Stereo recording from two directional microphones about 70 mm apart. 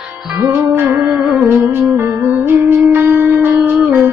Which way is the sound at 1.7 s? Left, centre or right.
Right.